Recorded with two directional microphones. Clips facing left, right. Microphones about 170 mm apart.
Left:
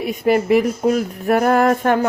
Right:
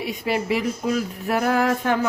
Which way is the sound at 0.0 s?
50° left (ahead or behind).